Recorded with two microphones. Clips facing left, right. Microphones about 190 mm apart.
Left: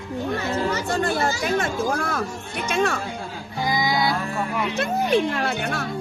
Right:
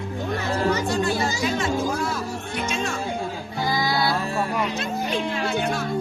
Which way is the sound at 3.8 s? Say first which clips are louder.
Left 1 dB; 15° left (ahead or behind).